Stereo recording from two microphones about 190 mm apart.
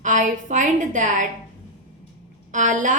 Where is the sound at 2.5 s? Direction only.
40° right (ahead or behind).